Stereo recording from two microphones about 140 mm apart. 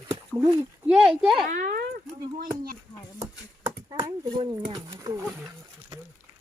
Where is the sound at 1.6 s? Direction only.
90° right.